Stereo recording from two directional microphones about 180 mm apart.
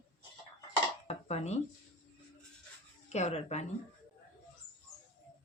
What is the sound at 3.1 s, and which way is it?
Speech, 40° left (ahead or behind).